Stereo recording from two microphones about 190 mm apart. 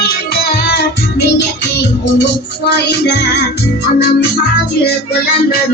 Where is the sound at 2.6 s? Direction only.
60° left (ahead or behind).